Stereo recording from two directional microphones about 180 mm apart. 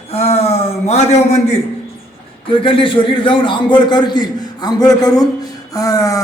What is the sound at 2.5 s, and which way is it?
A man's voice, 30° left (ahead or behind).